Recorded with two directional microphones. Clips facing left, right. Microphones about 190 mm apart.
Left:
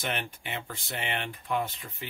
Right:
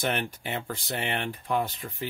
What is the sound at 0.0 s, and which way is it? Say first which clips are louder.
Speech: right 5 dB; 40° right (ahead or behind).